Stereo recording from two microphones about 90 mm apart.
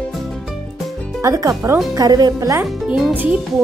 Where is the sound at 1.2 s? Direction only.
35° right (ahead or behind).